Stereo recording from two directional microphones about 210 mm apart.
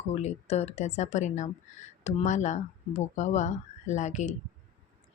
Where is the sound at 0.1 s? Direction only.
30° left (ahead or behind).